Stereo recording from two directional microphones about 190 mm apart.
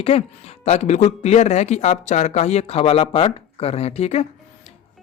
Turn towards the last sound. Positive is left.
turn(degrees=35)  # may be behind; listen again after turning